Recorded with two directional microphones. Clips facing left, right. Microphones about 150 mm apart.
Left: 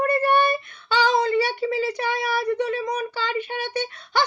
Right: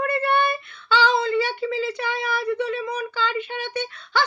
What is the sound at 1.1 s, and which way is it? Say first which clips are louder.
Child singing: left 1 dB; 40° left (ahead or behind).